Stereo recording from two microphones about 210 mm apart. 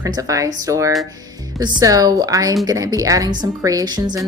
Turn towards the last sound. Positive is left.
turn(degrees=-20)  # may be behind; listen again after turning